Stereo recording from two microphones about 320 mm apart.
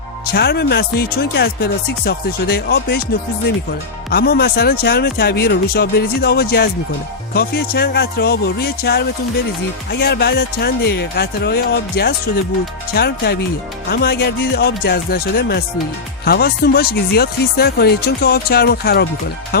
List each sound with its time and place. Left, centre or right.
0.3 s speech: left
4.1 s speech: left